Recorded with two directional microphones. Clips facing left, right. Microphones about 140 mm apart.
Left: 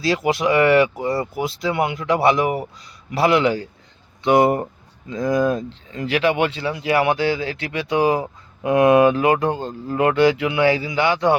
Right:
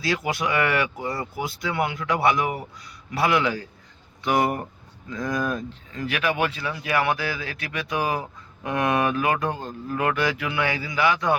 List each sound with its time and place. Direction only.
0.0 s speech: 25° left (ahead or behind)